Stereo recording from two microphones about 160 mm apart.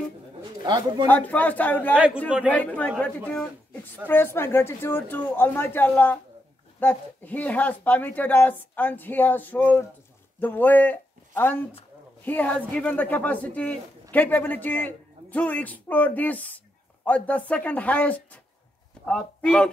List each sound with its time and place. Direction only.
0.7 s speech: 25° right (ahead or behind)
1.0 s speech: 10° left (ahead or behind)
4.1 s a man's voice: 15° left (ahead or behind)